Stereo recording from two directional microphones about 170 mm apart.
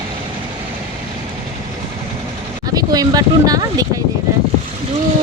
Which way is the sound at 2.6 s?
20° right (ahead or behind).